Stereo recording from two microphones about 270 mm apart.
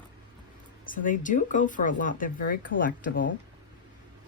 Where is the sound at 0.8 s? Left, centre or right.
Left.